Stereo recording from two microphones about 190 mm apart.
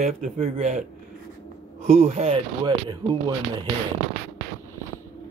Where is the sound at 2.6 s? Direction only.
25° right (ahead or behind).